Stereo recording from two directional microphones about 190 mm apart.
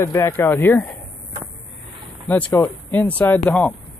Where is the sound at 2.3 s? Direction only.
10° left (ahead or behind).